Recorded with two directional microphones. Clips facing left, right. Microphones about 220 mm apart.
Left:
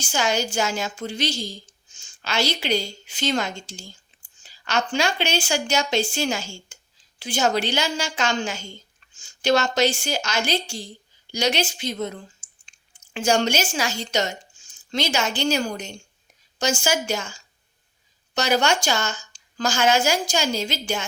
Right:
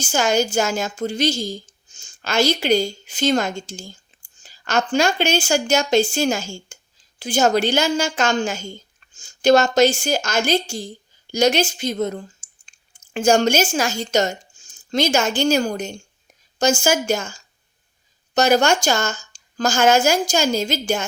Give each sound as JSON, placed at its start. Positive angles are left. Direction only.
{"t": 0.0, "sound": "a woman's voice", "side_deg": -45}
{"t": 12.4, "sound": "clicking", "side_deg": -45}
{"t": 13.1, "sound": "a woman's voice", "side_deg": -45}